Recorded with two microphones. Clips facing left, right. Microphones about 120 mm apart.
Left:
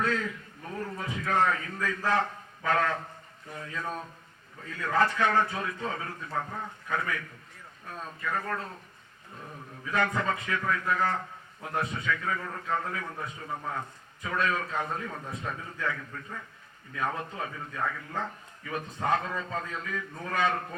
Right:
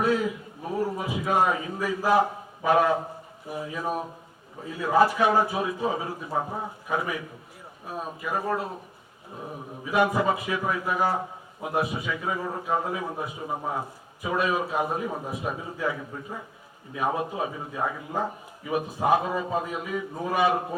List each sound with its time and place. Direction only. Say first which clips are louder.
0.0 s a man's voice: right 6 dB; 15° right (ahead or behind)